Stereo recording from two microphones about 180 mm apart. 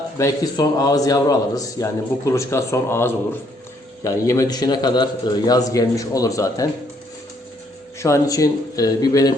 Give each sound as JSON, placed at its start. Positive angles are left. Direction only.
{"t": 0.2, "sound": "a man's voice", "side_deg": 20}
{"t": 7.9, "sound": "a man's voice", "side_deg": 15}